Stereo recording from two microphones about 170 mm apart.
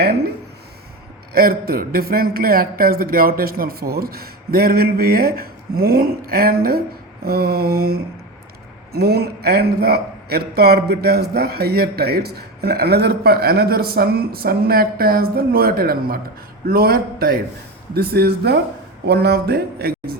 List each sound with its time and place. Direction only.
1.3 s a man's voice: 60° right (ahead or behind)